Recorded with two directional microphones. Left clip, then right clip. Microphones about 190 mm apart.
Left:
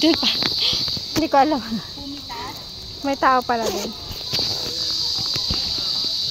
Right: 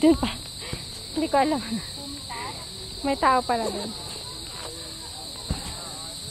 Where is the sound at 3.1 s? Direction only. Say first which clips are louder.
Left 4 dB; 10° left (ahead or behind).